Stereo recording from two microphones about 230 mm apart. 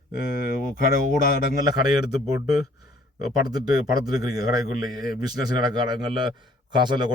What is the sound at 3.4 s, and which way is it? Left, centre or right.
A man's voice, centre.